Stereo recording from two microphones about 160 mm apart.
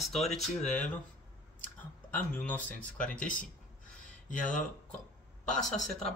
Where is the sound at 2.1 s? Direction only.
10° left (ahead or behind).